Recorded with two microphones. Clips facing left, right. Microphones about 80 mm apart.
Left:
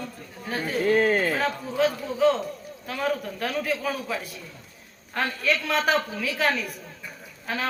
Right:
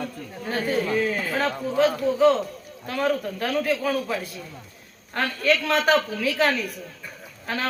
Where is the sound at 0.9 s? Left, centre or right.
Left.